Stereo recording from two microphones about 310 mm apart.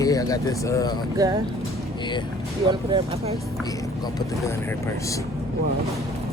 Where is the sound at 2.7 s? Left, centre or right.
Centre.